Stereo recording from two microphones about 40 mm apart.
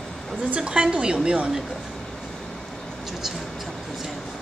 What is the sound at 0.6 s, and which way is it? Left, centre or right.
A woman's voice, right.